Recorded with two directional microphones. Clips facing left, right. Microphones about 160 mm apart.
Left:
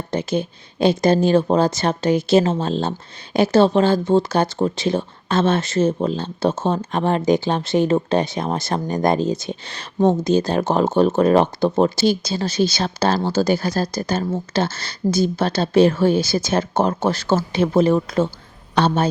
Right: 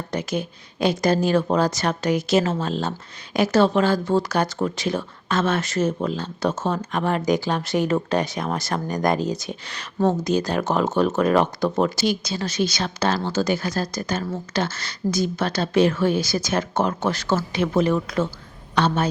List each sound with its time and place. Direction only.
0.1 s speech: 25° left (ahead or behind)